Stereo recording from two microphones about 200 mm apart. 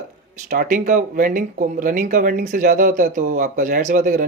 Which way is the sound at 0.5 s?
45° right (ahead or behind).